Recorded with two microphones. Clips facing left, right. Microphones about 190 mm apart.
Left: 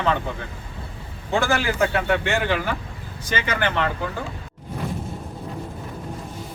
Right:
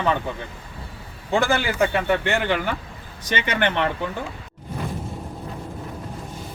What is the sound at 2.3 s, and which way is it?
Speech, 15° right (ahead or behind).